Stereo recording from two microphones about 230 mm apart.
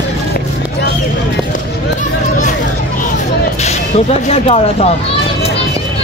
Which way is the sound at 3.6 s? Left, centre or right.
Left.